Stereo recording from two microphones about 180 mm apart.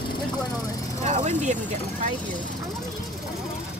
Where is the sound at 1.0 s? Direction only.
40° right (ahead or behind).